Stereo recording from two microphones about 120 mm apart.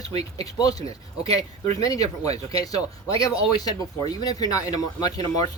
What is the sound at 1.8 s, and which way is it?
Speech, 30° left (ahead or behind).